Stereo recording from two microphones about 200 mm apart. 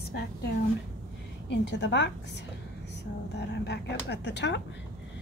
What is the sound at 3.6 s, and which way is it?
A woman's voice, 60° left (ahead or behind).